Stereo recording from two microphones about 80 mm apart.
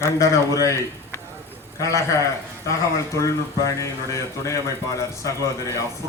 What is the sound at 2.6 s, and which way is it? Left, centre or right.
A man's voice, left.